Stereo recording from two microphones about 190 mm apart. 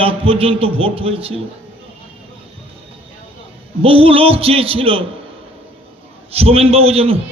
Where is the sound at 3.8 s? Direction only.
30° right (ahead or behind).